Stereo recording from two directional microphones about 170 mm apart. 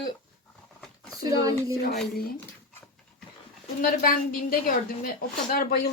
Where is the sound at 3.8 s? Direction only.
55° left (ahead or behind).